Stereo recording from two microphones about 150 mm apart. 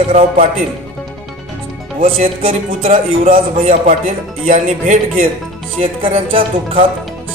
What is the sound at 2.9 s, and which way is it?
Speech, 70° right (ahead or behind).